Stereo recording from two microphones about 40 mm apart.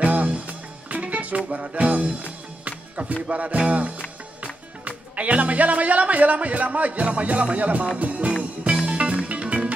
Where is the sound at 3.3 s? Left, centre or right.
Right.